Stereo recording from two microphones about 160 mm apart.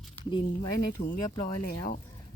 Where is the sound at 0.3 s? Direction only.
30° left (ahead or behind).